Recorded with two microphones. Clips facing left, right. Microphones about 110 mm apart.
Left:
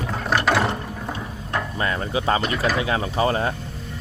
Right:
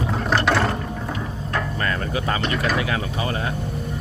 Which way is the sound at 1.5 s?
20° left (ahead or behind).